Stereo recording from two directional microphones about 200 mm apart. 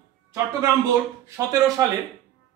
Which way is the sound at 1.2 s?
15° right (ahead or behind).